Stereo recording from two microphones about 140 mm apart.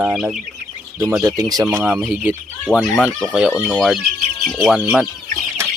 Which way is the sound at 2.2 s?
15° right (ahead or behind).